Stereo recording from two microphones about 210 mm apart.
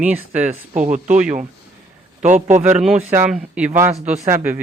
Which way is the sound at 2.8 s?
5° right (ahead or behind).